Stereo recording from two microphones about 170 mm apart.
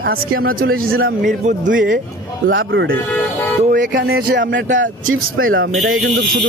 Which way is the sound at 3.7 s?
60° right (ahead or behind).